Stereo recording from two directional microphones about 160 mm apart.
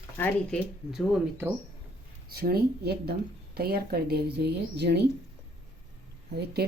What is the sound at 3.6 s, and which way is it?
A woman's voice, 75° right (ahead or behind).